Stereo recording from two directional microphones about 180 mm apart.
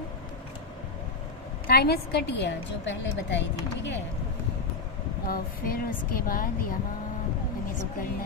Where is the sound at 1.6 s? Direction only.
60° left (ahead or behind); by 4.0 s 80° left.